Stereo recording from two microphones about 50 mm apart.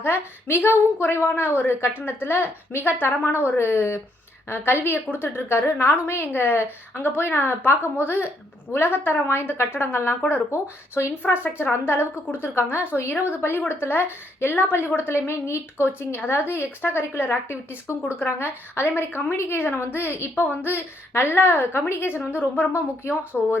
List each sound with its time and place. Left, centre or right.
0.0 s a woman's voice: left
3.6 s a woman's voice: left
6.3 s a woman's voice: left
11.5 s a woman's voice: left
15.9 s a woman's voice: left
22.7 s a woman's voice: left